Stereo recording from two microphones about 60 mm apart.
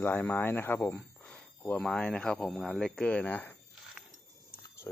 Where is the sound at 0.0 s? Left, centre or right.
Left.